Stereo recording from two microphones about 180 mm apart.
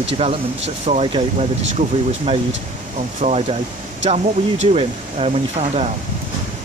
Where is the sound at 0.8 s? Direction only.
40° right (ahead or behind).